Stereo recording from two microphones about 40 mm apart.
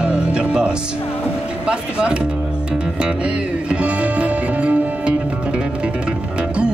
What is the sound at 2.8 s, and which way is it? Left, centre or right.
Music, right.